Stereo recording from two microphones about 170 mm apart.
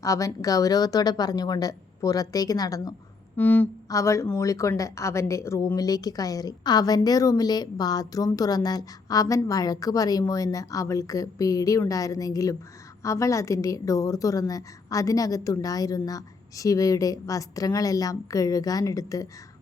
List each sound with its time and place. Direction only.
0.0 s a woman's voice: 20° left (ahead or behind)
3.3 s a woman's voice: 10° left (ahead or behind)